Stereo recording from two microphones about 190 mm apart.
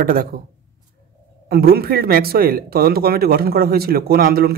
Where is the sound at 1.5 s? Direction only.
55° right (ahead or behind).